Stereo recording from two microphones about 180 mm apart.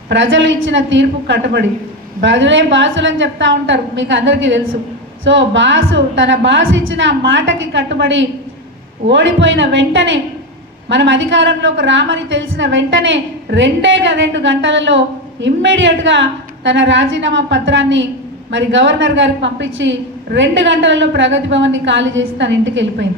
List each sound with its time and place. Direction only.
0.1 s a woman's voice: 90° right